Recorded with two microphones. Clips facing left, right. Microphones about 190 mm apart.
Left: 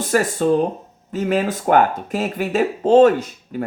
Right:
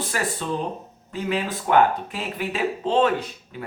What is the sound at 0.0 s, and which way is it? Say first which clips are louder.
Speech: left 10 dB; 45° left (ahead or behind).